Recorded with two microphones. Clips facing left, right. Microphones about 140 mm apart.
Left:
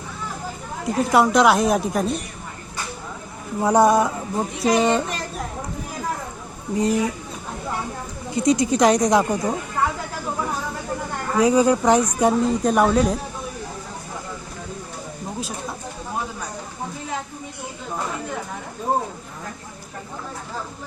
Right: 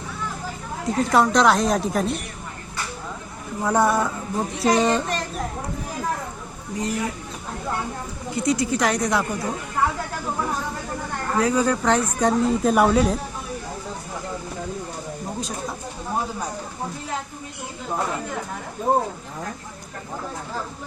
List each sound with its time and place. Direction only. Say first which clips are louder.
0.9 s a woman's voice: left 1 dB; 5° left (ahead or behind)
3.6 s speech: left 4 dB; 15° left (ahead or behind)
4.5 s a woman's voice: left 1 dB; centre (ahead or behind)
6.7 s speech: left 6 dB; 20° left (ahead or behind)
8.4 s speech: left 4 dB; 20° left (ahead or behind)
11.3 s speech: left 4 dB; 15° left (ahead or behind)
12.4 s a woman's voice: even; 5° right (ahead or behind)
15.4 s a sound: left 1 dB; 5° left (ahead or behind)